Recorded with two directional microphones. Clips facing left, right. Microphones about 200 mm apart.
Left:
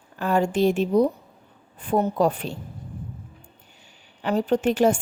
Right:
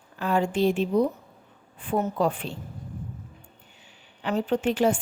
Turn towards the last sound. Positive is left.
turn(degrees=45)  # may be behind; listen again after turning